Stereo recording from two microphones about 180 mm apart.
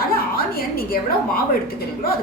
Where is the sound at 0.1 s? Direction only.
55° left (ahead or behind).